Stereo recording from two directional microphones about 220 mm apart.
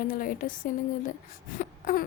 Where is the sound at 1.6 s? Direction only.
40° left (ahead or behind).